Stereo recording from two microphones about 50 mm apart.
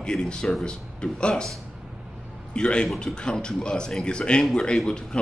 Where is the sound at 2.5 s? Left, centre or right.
Centre.